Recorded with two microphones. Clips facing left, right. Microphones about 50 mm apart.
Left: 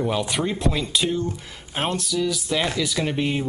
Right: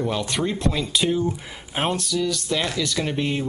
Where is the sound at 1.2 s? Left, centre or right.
Centre.